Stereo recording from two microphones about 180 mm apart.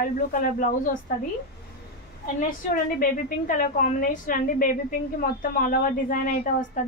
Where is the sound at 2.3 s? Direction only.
45° left (ahead or behind).